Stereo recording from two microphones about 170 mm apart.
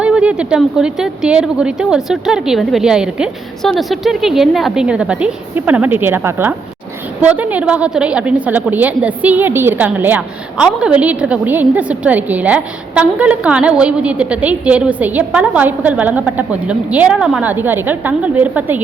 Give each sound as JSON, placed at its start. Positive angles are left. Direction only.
{"t": 0.0, "sound": "a woman's voice", "side_deg": -5}